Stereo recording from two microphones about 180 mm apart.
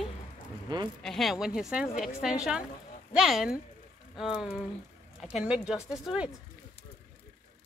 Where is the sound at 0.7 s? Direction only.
25° right (ahead or behind).